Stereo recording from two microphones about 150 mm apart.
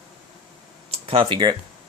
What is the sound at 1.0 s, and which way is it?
Speech, 40° right (ahead or behind).